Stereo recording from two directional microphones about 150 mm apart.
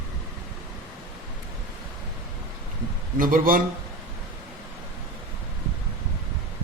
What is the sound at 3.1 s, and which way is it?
Speech, 65° right (ahead or behind).